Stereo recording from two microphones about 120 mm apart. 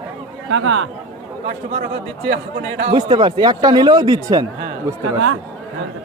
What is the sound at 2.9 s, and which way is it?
Speech, 45° right (ahead or behind).